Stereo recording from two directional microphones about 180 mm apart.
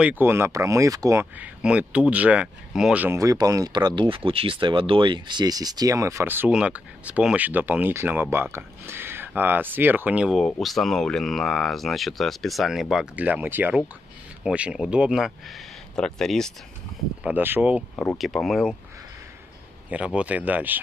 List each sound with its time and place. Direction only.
0.0 s speech: 10° right (ahead or behind)
1.4 s speech: 5° right (ahead or behind)
17.2 s speech: 10° right (ahead or behind)
19.9 s speech: 5° right (ahead or behind)